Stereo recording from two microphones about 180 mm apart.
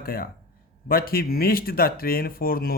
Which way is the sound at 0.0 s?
55° left (ahead or behind).